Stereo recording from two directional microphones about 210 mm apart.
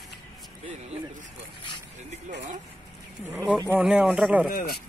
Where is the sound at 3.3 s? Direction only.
10° right (ahead or behind).